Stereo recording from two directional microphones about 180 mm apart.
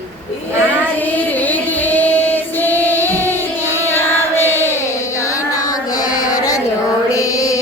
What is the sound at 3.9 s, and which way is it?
Music, 15° left (ahead or behind).